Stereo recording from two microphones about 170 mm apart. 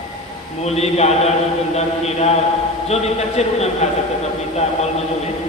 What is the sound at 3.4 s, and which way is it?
Speech, 40° left (ahead or behind).